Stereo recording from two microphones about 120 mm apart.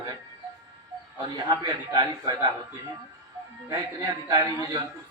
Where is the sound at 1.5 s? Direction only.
30° right (ahead or behind).